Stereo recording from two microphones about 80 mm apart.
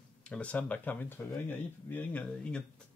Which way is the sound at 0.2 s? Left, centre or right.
Centre.